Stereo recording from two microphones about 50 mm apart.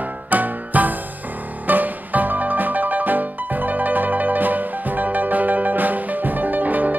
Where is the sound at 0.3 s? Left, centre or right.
Right.